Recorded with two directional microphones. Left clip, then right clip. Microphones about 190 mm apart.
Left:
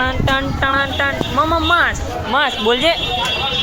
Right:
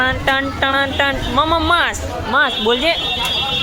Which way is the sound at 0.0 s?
20° right (ahead or behind).